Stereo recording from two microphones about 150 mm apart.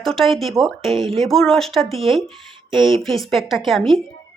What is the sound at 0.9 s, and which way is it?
Speech, 35° right (ahead or behind).